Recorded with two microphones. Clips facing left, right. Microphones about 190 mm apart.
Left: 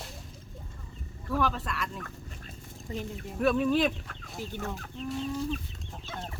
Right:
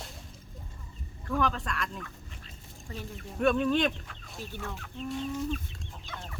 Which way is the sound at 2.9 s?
25° left (ahead or behind).